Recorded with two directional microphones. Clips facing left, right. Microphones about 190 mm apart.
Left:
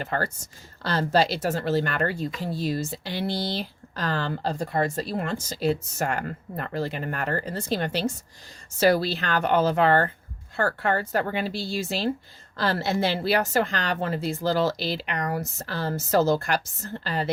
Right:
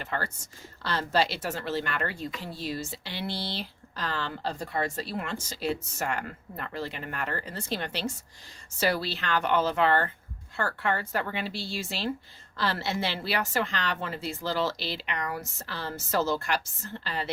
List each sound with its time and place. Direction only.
0.0 s speech: 40° left (ahead or behind)